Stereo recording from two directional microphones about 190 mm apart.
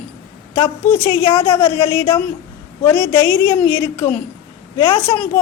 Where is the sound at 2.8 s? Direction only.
10° left (ahead or behind).